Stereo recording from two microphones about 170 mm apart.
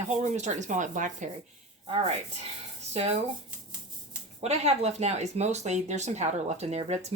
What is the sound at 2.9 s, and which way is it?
Speech, 40° right (ahead or behind).